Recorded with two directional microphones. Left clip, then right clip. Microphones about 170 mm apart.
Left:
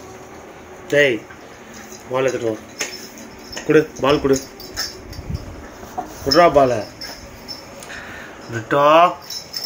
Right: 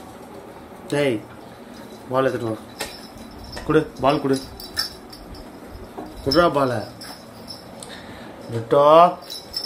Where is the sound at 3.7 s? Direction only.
20° right (ahead or behind).